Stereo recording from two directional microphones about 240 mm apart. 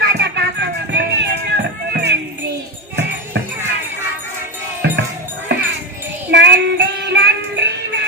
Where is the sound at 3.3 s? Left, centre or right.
Right.